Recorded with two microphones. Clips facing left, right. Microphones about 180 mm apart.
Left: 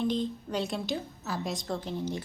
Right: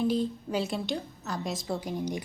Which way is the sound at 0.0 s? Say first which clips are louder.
Right 2 dB; 5° right (ahead or behind).